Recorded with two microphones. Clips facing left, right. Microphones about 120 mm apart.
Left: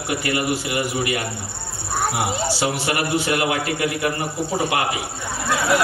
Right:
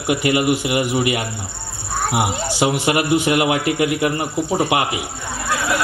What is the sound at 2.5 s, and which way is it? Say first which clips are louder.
A man's voice: right 5 dB; 20° right (ahead or behind).